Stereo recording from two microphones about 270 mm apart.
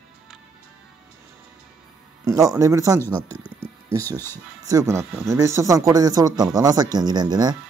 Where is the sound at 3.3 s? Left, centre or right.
Centre.